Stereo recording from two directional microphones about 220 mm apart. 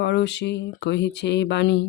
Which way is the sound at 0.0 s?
50° left (ahead or behind).